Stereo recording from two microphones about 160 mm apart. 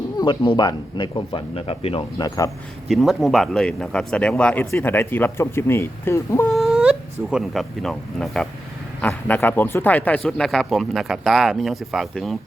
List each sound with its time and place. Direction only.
0.2 s speech: 30° left (ahead or behind)
2.9 s speech: centre (ahead or behind); by 6.5 s 15° left (ahead or behind)
6.5 s speech: centre (ahead or behind)